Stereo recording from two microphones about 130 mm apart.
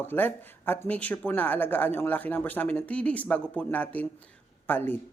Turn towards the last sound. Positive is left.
turn(degrees=15)  # may be behind; listen again after turning